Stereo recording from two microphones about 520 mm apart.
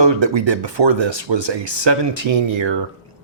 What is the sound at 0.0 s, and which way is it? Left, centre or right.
Speech, right.